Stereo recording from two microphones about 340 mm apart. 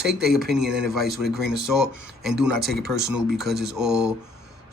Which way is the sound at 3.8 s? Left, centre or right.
Centre.